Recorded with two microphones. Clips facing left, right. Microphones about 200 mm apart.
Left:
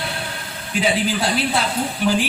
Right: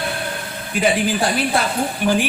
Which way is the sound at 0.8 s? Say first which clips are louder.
Right 2 dB; 50° right (ahead or behind).